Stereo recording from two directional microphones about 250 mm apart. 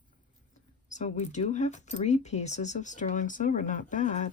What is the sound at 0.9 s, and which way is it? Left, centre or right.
Speech, left.